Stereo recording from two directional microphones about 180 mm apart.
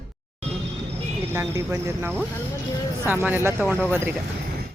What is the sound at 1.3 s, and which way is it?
Speech, 15° right (ahead or behind).